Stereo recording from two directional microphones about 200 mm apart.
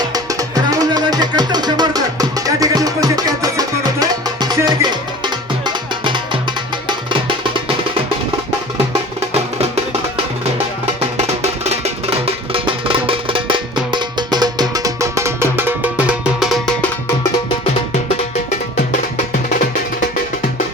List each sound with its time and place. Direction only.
0.1 s music: 15° right (ahead or behind)
11.6 s music: 30° right (ahead or behind); by 16.9 s centre (ahead or behind)